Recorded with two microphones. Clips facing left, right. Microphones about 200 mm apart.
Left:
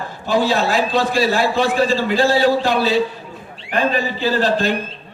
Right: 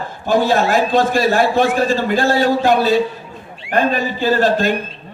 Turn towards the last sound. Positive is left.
turn(degrees=-50)  # may be behind; listen again after turning